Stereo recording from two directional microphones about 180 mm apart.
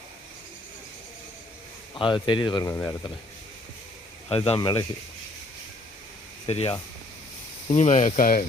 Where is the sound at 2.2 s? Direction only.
25° left (ahead or behind).